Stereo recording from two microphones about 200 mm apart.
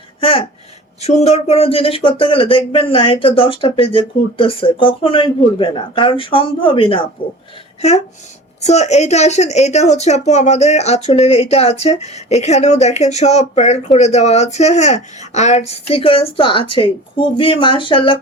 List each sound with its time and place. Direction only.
0.2 s a woman's voice: 25° left (ahead or behind)